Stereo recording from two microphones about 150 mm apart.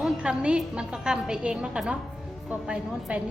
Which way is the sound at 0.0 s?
5° right (ahead or behind).